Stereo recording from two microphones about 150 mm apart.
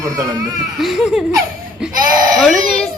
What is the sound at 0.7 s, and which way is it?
Speech, centre (ahead or behind).